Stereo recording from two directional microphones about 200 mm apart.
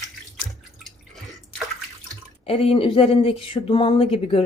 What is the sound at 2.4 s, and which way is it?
Speech, 30° left (ahead or behind).